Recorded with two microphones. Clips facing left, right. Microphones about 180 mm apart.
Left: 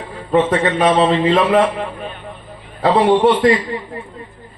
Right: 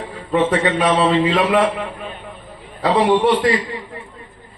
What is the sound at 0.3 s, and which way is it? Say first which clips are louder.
A man's voice: left 2 dB; 40° left (ahead or behind).